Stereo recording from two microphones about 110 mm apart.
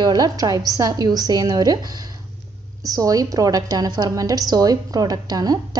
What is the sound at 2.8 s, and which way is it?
A woman's voice, 35° right (ahead or behind).